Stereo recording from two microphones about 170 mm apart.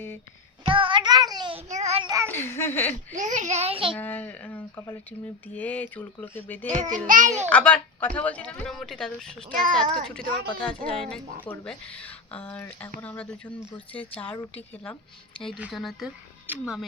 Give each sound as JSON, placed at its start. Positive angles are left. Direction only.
{"t": 0.6, "sound": "child singing", "side_deg": -30}
{"t": 1.7, "sound": "child singing", "side_deg": -40}
{"t": 2.0, "sound": "a sound", "side_deg": -20}
{"t": 2.3, "sound": "speech", "side_deg": 15}
{"t": 3.1, "sound": "a child's voice", "side_deg": -45}
{"t": 3.9, "sound": "speech", "side_deg": 10}
{"t": 6.7, "sound": "a child's voice", "side_deg": -45}
{"t": 7.5, "sound": "speech", "side_deg": 5}
{"t": 9.5, "sound": "a child's voice", "side_deg": -55}
{"t": 9.7, "sound": "a child's voice", "side_deg": 5}
{"t": 15.4, "sound": "a child's voice", "side_deg": 0}